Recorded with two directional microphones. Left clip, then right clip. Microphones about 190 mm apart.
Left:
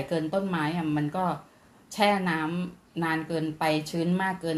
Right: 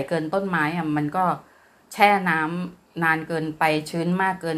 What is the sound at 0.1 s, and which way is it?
A woman's voice, 15° right (ahead or behind).